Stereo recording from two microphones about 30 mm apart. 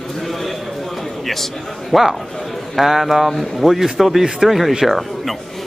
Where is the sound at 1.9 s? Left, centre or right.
Centre.